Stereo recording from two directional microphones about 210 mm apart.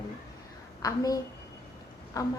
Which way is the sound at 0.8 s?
15° left (ahead or behind).